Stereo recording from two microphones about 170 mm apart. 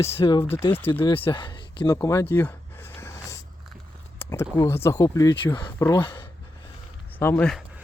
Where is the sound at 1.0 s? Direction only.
25° left (ahead or behind).